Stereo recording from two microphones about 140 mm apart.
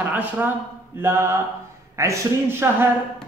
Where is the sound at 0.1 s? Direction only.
10° right (ahead or behind).